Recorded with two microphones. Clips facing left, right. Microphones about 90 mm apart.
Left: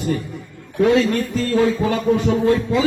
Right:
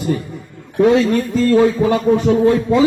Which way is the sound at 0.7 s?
25° right (ahead or behind).